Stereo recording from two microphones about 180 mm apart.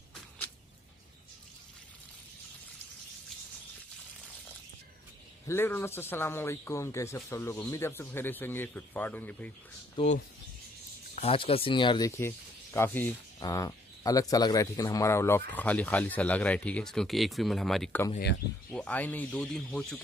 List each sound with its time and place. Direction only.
5.5 s speech: 10° left (ahead or behind)
10.0 s speech: 30° left (ahead or behind)
11.1 s speech: 30° left (ahead or behind)
12.2 s speech: 15° left (ahead or behind)